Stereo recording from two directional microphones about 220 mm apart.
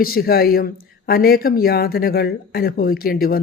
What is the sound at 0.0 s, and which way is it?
A man's voice, 45° left (ahead or behind).